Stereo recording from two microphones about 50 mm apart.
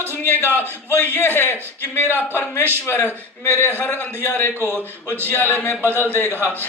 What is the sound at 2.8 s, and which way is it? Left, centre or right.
A man's voice, left.